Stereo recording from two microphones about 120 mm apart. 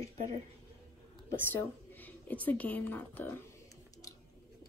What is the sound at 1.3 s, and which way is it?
A woman's voice, 20° left (ahead or behind).